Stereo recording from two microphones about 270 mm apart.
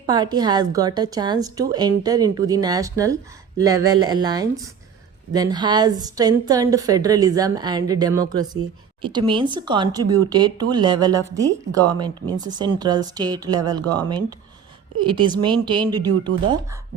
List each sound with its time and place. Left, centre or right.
0.0 s a woman's voice: centre